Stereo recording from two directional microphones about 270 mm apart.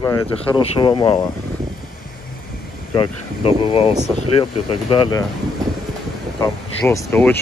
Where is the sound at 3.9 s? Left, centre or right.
Centre.